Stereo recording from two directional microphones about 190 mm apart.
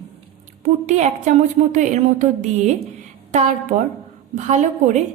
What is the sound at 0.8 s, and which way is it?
Speech, 35° right (ahead or behind).